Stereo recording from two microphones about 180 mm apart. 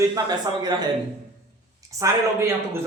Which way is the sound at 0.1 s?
25° right (ahead or behind).